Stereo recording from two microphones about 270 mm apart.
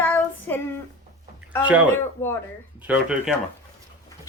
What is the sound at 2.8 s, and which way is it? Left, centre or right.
Speech, centre.